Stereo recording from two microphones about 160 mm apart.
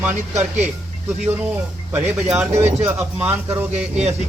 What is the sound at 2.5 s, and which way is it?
Speech, 40° right (ahead or behind).